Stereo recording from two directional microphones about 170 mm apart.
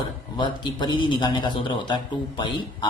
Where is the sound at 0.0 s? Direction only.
25° left (ahead or behind).